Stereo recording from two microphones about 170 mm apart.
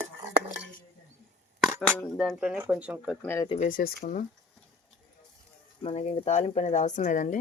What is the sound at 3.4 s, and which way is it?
Speech, 45° left (ahead or behind).